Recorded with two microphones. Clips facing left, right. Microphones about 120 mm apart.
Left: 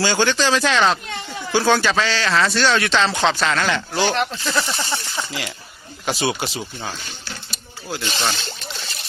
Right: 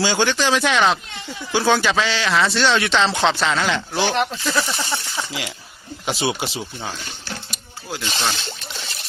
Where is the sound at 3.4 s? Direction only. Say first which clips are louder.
Even; 10° right (ahead or behind).